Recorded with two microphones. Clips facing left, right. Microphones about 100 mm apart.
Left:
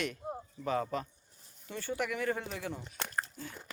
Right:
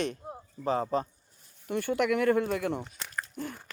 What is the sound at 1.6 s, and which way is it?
Speech, 60° right (ahead or behind).